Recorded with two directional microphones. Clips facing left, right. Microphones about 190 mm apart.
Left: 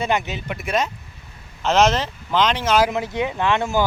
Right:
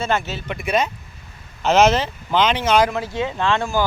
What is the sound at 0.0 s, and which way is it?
Speech, 15° left (ahead or behind).